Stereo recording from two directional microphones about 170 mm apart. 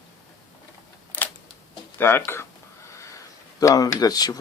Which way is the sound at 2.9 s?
20° left (ahead or behind).